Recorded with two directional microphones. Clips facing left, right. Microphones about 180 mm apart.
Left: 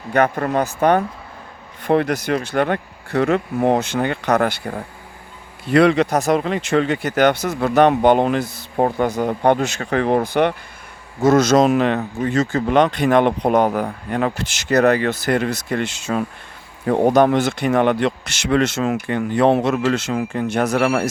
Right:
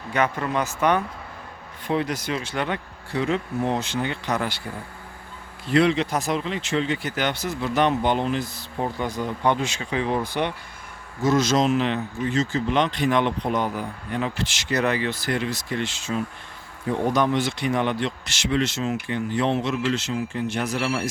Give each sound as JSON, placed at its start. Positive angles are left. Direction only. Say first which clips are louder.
{"t": 0.1, "sound": "speech", "louder": "left 6 dB", "side_deg": 60}
{"t": 1.8, "sound": "speech", "louder": "left 7 dB", "side_deg": 60}
{"t": 3.1, "sound": "speech", "louder": "left 6 dB", "side_deg": 70}
{"t": 11.5, "sound": "speech", "louder": "left 6 dB", "side_deg": 60}
{"t": 13.7, "sound": "speech", "louder": "left 8 dB", "side_deg": 70}